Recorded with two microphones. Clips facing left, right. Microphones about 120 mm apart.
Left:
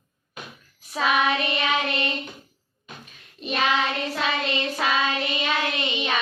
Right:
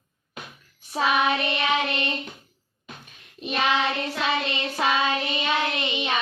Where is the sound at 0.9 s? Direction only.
25° right (ahead or behind).